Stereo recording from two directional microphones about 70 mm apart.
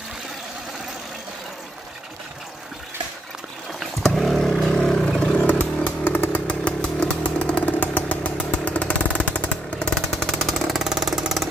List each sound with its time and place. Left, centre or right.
4.0 s vehicle: centre
5.2 s motorcycle: centre
9.9 s vehicle: centre